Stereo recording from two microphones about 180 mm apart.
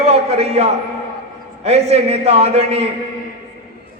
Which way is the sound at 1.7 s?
35° right (ahead or behind).